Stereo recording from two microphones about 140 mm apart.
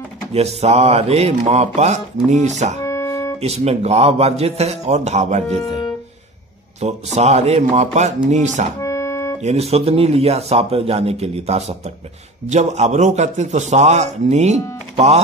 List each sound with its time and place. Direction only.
0.3 s a man's voice: 50° right (ahead or behind)
2.8 s music: 20° left (ahead or behind)
3.3 s speech: 50° right (ahead or behind)
6.8 s a man's voice: 55° right (ahead or behind)
8.8 s organ: 20° left (ahead or behind)
9.4 s a man's voice: 50° right (ahead or behind)